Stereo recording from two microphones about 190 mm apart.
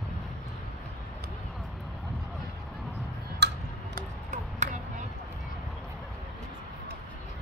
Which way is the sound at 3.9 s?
40° right (ahead or behind).